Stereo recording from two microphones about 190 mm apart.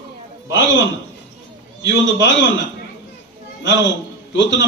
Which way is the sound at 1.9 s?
70° left (ahead or behind).